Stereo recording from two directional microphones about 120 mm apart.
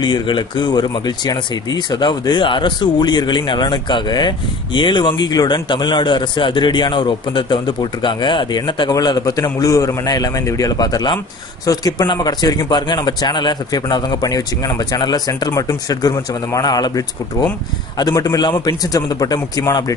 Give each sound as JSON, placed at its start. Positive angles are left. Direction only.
{"t": 0.0, "sound": "speech", "side_deg": 40}